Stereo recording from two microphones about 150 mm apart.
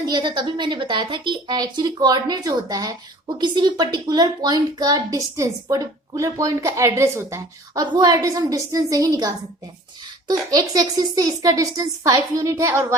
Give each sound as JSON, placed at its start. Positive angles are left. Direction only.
{"t": 0.0, "sound": "a woman's voice", "side_deg": -30}